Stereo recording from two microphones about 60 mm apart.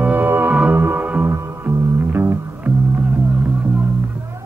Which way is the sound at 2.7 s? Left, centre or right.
Right.